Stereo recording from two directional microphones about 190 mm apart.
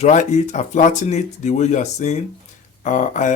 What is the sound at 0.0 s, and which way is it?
Speech, 40° left (ahead or behind).